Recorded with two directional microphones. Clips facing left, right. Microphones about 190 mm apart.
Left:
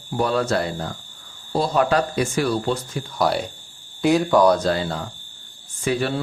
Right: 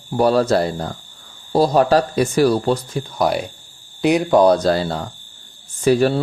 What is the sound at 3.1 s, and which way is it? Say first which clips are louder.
Speech: right 2 dB; 20° right (ahead or behind).